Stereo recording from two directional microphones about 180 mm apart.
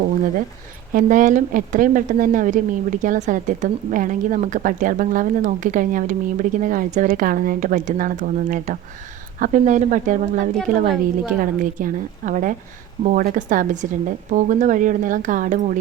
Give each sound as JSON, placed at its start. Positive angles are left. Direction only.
{"t": 0.9, "sound": "a woman's voice", "side_deg": -45}